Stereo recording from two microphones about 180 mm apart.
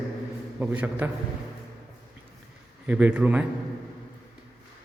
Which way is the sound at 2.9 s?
5° right (ahead or behind).